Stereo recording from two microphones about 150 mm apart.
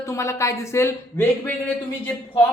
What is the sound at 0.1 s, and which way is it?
A woman's voice, 20° left (ahead or behind).